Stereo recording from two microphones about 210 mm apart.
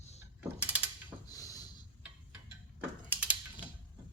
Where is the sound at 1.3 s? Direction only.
15° left (ahead or behind).